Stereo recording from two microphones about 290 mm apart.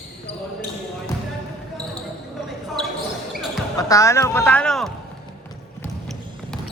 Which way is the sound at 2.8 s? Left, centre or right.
Centre.